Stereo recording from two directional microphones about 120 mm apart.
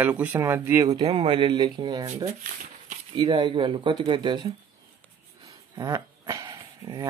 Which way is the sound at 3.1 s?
45° right (ahead or behind).